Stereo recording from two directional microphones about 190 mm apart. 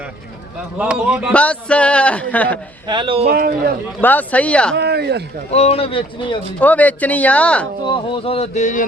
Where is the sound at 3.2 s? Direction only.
50° right (ahead or behind).